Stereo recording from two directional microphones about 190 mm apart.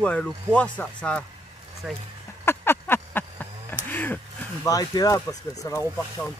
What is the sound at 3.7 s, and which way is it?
Speech, 10° left (ahead or behind).